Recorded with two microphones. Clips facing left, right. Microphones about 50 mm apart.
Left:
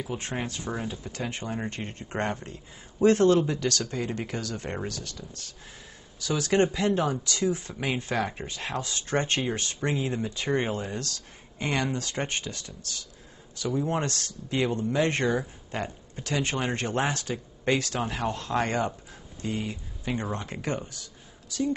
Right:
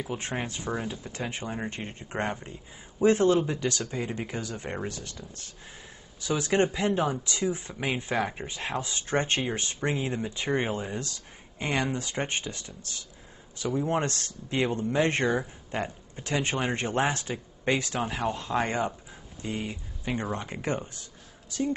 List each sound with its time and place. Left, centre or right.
0.7 s a man's voice: centre
1.3 s a man's voice: centre
18.0 s a man's voice: centre
20.6 s speech: right